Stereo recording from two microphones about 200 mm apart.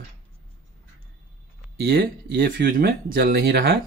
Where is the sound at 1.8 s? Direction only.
45° right (ahead or behind).